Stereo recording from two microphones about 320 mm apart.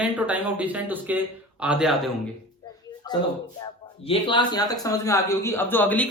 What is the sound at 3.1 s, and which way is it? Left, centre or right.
A man's voice, centre.